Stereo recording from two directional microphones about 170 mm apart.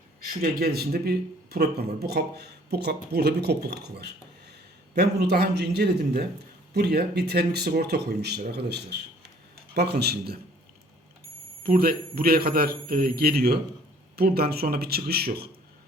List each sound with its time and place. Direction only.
0.4 s speech: 65° right (ahead or behind)
11.6 s a man's voice: 60° right (ahead or behind)